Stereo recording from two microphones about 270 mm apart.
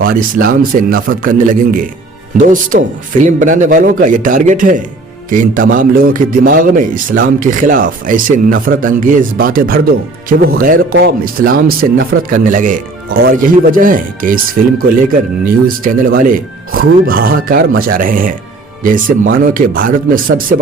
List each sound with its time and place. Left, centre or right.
0.0 s a man's voice: right
15.4 s a man's voice: right